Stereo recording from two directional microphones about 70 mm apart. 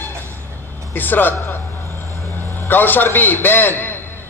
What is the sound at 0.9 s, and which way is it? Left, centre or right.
Speech, left.